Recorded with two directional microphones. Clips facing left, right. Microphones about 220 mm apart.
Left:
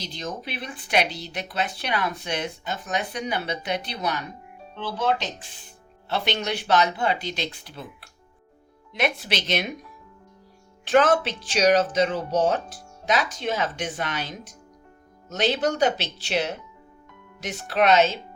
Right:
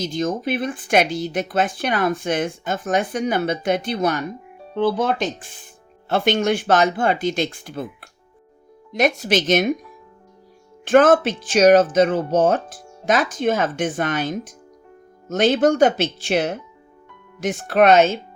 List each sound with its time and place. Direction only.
0.0 s speech: 45° right (ahead or behind)
10.8 s speech: 50° right (ahead or behind)